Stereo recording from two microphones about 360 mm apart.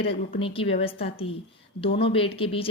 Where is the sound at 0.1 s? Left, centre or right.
Centre.